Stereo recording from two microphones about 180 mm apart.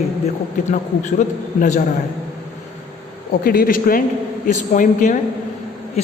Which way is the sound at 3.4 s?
55° left (ahead or behind).